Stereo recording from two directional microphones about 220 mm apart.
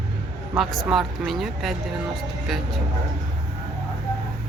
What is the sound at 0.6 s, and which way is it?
Speech, centre (ahead or behind).